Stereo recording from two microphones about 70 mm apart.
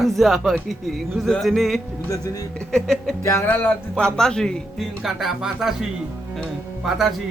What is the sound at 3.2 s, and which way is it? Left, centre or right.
Music, left.